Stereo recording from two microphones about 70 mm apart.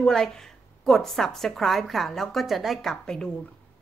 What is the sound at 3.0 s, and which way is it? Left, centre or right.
Speech, centre.